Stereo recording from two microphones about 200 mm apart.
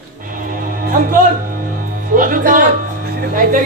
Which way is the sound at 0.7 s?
45° right (ahead or behind).